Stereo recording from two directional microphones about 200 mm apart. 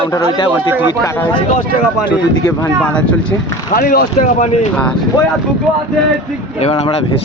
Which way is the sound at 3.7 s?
45° left (ahead or behind).